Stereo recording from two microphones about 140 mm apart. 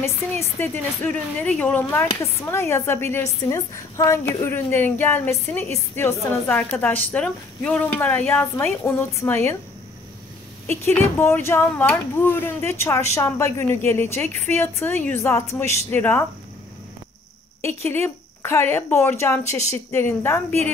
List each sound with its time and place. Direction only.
0.0 s a woman's voice: 15° left (ahead or behind)
10.7 s speech: 15° left (ahead or behind)
17.8 s speech: 20° left (ahead or behind)